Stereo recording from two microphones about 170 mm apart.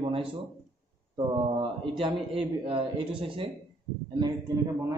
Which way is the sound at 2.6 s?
30° right (ahead or behind).